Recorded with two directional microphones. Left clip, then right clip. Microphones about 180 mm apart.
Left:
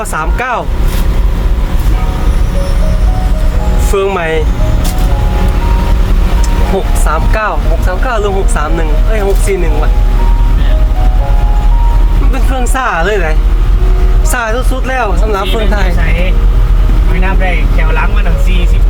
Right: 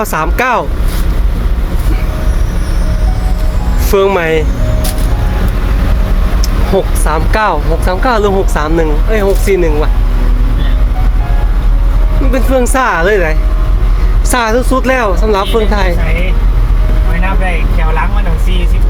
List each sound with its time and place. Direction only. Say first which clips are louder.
0.0 s speech: right 3 dB; 15° right (ahead or behind)
3.9 s speech: right 3 dB; 10° right (ahead or behind)
7.0 s speech: right 2 dB; 15° right (ahead or behind)
12.3 s speech: right 6 dB; 15° right (ahead or behind)